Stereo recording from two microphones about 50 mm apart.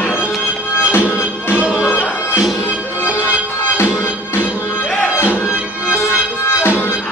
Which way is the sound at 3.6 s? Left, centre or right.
Left.